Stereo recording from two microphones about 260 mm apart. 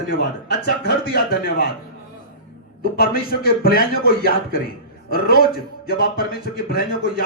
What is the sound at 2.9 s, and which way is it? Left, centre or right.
Speech, left.